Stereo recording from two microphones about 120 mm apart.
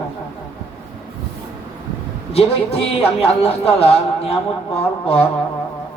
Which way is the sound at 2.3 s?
55° left (ahead or behind).